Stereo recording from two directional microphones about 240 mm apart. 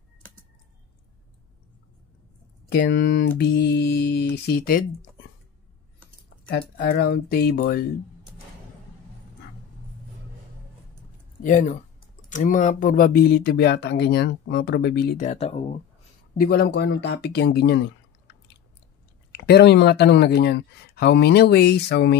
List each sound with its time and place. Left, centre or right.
2.7 s speech: left
6.8 s speech: left
11.4 s speech: left
16.3 s speech: left
19.3 s speech: left